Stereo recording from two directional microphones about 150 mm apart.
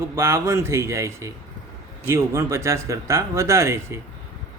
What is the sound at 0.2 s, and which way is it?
Speech, 20° right (ahead or behind).